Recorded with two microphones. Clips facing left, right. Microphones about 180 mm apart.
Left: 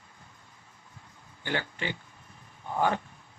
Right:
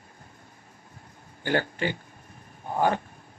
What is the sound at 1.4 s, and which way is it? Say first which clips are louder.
Speech: right 7 dB; 45° right (ahead or behind).